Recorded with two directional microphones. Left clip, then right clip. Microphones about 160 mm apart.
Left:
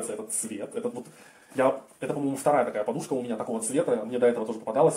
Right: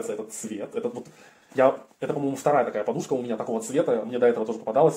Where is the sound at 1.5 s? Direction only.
30° right (ahead or behind).